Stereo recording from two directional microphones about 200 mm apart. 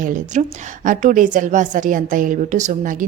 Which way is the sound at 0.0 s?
40° right (ahead or behind).